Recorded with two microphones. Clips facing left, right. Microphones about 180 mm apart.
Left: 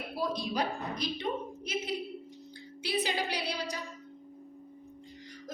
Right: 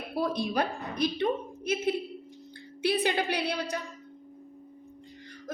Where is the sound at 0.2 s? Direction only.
55° right (ahead or behind).